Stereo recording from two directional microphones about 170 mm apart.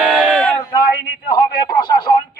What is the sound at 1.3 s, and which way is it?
Speech, 25° left (ahead or behind).